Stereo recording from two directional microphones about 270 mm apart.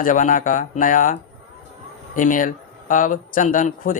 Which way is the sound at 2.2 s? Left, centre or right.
Left.